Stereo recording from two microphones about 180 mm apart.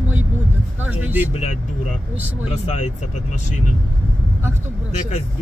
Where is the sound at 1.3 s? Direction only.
40° left (ahead or behind).